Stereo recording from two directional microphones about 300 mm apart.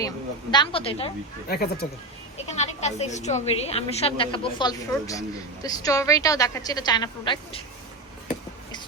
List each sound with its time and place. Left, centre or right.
0.5 s a woman's voice: centre
1.5 s a woman's voice: left; by 7.6 s centre